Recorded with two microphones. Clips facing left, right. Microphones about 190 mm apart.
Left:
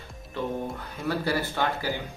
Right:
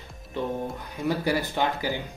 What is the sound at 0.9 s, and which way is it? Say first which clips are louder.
Speech: right 2 dB; 15° right (ahead or behind).